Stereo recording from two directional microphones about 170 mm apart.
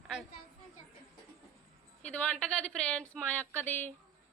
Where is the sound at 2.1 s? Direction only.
10° left (ahead or behind).